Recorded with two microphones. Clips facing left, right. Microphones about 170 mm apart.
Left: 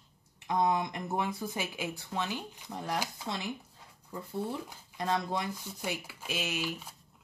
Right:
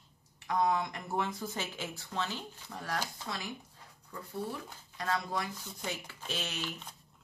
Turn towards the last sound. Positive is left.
turn(degrees=10)  # may be behind; listen again after turning